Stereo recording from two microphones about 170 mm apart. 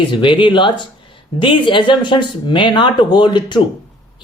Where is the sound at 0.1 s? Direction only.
30° left (ahead or behind).